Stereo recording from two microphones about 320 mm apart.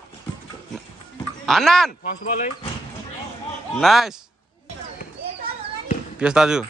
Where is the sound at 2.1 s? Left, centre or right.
Left.